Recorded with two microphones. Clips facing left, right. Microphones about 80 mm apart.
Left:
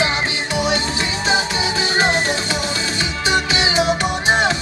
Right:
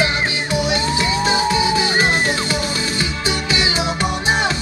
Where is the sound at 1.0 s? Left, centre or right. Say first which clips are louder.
Right 2 dB; left.